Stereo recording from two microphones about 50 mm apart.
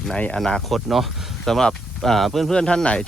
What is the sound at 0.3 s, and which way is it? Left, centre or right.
Speech, centre.